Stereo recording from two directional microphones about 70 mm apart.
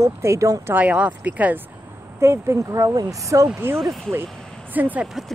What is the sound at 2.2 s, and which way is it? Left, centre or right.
Speech, right.